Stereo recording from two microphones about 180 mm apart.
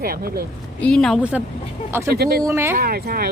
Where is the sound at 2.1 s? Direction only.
60° right (ahead or behind).